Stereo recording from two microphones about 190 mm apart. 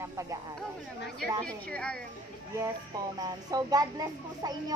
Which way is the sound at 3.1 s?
20° right (ahead or behind).